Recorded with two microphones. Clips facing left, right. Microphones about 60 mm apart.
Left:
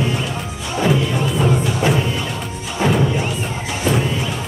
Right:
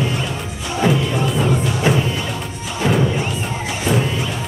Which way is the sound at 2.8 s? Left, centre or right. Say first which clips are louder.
Left 1 dB; centre.